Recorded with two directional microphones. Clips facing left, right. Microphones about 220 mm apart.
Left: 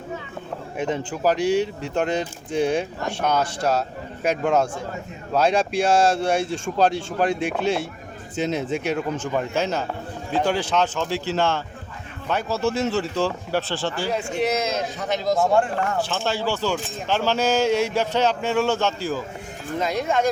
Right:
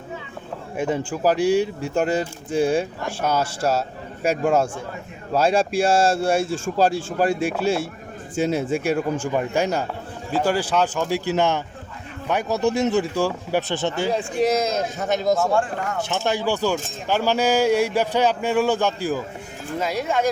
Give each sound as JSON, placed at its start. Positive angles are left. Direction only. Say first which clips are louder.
{"t": 0.9, "sound": "speech", "louder": "right 1 dB", "side_deg": -10}
{"t": 14.9, "sound": "a man's voice", "louder": "right 3 dB", "side_deg": -45}
{"t": 16.0, "sound": "speech", "louder": "right 2 dB", "side_deg": -20}